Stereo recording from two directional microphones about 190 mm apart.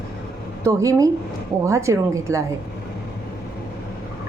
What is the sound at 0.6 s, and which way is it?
A woman's voice, 15° right (ahead or behind).